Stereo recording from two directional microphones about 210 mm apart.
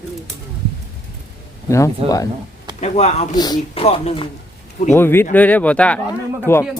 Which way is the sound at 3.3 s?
20° left (ahead or behind).